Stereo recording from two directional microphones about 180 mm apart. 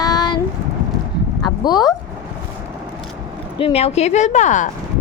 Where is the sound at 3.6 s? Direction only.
35° left (ahead or behind).